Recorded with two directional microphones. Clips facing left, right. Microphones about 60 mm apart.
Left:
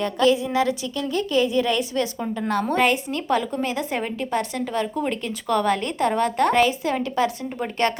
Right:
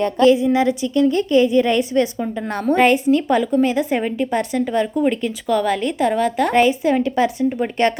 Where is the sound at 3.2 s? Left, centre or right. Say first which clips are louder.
Right 6 dB; centre.